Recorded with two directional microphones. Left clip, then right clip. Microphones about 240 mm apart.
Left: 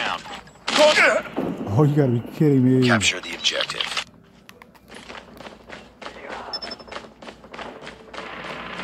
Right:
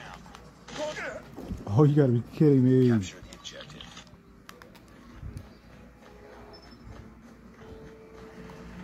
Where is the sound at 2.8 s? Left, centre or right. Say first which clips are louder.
Left 9 dB; left.